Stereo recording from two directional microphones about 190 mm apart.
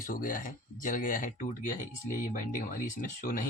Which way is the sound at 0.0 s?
45° left (ahead or behind).